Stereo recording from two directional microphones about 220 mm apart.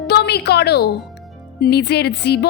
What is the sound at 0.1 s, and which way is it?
A woman's voice, 45° left (ahead or behind).